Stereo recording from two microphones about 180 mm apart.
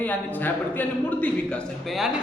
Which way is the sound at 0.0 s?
10° left (ahead or behind).